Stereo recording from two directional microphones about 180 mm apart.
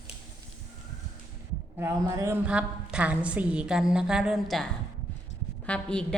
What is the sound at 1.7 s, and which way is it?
A woman's voice, 15° right (ahead or behind).